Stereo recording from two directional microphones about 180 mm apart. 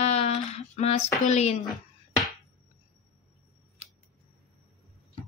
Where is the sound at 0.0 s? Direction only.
35° left (ahead or behind).